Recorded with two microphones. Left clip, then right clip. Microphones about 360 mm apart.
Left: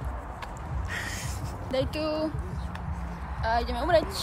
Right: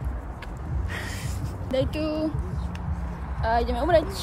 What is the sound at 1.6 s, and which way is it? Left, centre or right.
Speech, centre.